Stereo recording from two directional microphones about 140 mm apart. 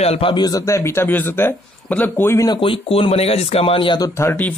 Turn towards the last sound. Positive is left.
turn(degrees=15)  # may be behind; listen again after turning